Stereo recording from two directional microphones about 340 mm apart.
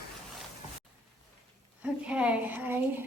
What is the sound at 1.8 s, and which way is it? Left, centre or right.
Child singing, centre.